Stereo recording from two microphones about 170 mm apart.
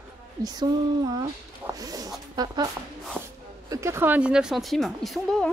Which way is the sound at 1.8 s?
20° right (ahead or behind).